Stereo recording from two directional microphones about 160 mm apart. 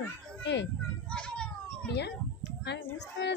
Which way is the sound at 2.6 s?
90° left.